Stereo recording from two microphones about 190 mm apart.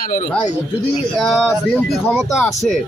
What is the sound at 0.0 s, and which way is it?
Speech, 45° left (ahead or behind).